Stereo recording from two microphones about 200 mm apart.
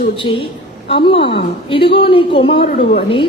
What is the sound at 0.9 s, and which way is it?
A woman's voice, 25° left (ahead or behind).